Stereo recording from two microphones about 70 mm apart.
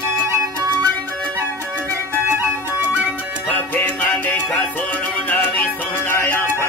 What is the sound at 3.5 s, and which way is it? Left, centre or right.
Music, left.